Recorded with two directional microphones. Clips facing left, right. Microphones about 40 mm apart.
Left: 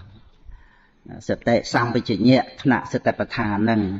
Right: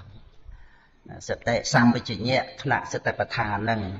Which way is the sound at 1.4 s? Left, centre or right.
Left.